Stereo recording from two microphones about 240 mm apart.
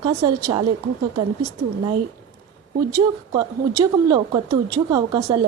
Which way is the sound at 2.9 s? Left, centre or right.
Centre.